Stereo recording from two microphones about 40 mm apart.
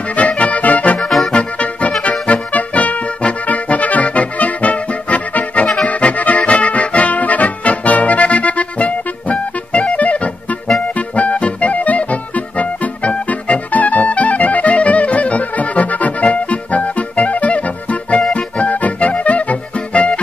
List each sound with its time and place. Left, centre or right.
0.1 s accordion: left
1.3 s music: left
2.0 s accordion: left
11.0 s music: left